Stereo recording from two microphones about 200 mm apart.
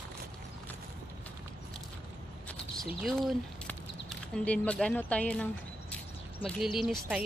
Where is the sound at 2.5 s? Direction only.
Centre (ahead or behind).